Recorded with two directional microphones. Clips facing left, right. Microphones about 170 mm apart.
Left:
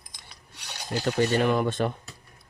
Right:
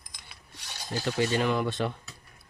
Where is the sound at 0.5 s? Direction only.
65° left (ahead or behind); by 2.0 s 50° left (ahead or behind).